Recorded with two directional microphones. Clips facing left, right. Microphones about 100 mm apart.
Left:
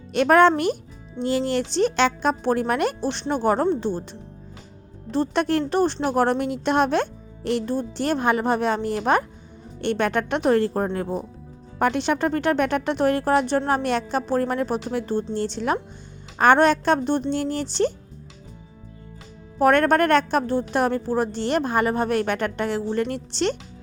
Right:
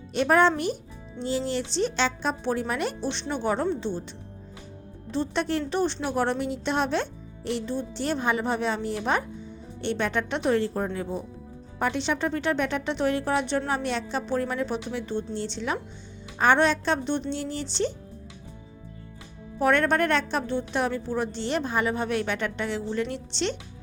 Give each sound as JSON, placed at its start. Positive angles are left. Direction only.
{"t": 0.1, "sound": "a woman's voice", "side_deg": 65}
{"t": 5.1, "sound": "a woman's voice", "side_deg": 50}
{"t": 19.5, "sound": "a woman's voice", "side_deg": 50}